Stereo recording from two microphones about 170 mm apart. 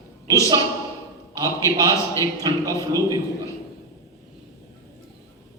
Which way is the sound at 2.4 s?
25° right (ahead or behind).